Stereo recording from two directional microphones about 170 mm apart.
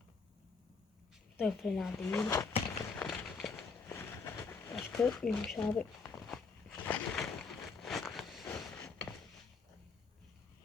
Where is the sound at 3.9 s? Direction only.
15° left (ahead or behind).